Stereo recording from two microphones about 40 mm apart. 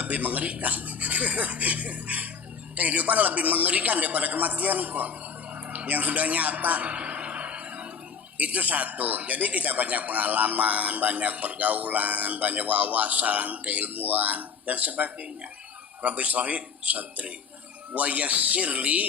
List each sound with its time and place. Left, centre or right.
0.0 s a man's voice: right
5.7 s a sound: right
8.4 s a man's voice: right